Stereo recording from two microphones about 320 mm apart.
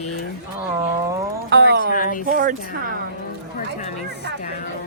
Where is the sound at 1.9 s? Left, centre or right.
Left.